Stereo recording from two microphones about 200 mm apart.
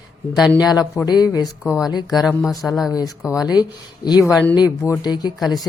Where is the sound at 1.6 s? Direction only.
5° right (ahead or behind).